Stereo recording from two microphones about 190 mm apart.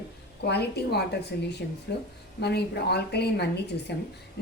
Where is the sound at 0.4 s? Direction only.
60° left (ahead or behind).